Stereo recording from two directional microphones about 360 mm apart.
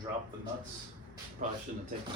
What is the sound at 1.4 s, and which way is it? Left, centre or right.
Speech, right.